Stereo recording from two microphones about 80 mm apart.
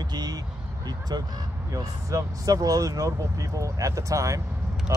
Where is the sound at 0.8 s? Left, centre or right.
Right.